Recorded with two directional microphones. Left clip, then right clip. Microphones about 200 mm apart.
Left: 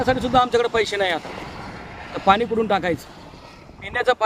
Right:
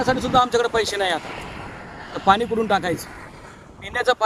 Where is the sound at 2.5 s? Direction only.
Centre (ahead or behind).